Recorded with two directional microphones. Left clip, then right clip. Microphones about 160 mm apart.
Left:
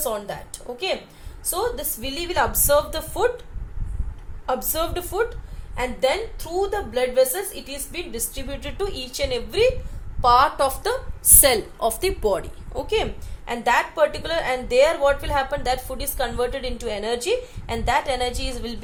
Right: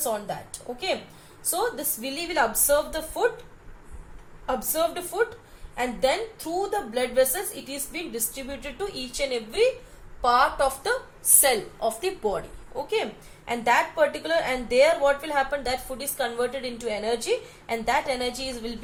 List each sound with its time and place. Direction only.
0.0 s a woman's voice: 55° left (ahead or behind)
4.4 s a woman's voice: 55° left (ahead or behind)
6.6 s a woman's voice: 55° left (ahead or behind)
11.3 s a woman's voice: 90° left
13.5 s a woman's voice: 60° left (ahead or behind)